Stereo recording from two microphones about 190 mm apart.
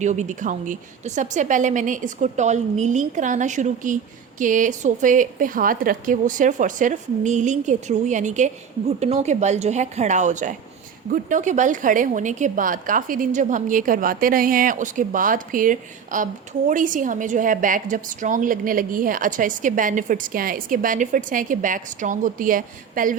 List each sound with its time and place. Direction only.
0.0 s a woman's voice: 40° right (ahead or behind)